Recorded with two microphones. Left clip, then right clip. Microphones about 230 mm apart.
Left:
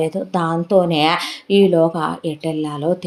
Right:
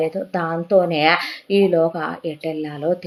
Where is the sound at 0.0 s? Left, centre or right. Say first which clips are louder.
Left 2 dB; left.